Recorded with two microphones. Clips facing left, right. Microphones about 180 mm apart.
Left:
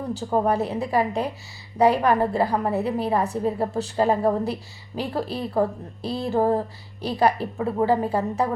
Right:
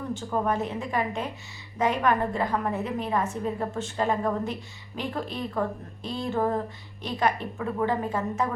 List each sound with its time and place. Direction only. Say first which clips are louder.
0.1 s a woman's voice: left 5 dB; 35° left (ahead or behind)